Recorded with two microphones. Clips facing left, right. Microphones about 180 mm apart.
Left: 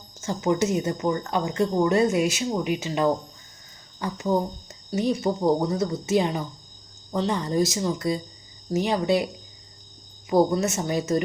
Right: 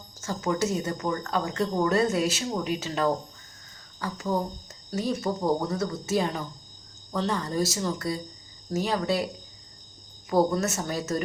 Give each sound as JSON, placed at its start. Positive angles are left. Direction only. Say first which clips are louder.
{"t": 0.2, "sound": "speech", "louder": "left 4 dB", "side_deg": 20}
{"t": 10.2, "sound": "speech", "louder": "left 3 dB", "side_deg": 15}